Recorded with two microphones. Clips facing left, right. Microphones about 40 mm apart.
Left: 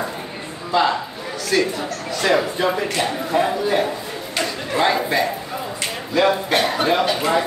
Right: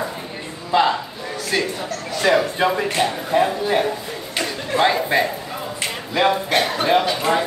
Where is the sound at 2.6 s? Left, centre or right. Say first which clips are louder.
Right 1 dB; right.